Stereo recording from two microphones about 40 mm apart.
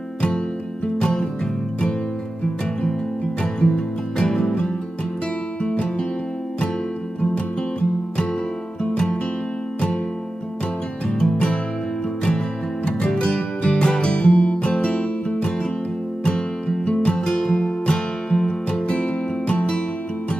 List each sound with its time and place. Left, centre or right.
3.5 s music: left
8.9 s music: left
11.1 s music: left
13.0 s music: centre
17.3 s music: centre